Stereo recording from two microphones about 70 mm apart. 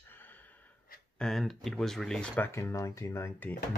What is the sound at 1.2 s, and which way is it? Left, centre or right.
Speech, centre.